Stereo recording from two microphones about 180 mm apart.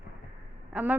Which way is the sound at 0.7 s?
10° right (ahead or behind).